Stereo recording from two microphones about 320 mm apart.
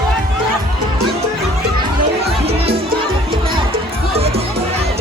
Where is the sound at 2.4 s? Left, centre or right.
Centre.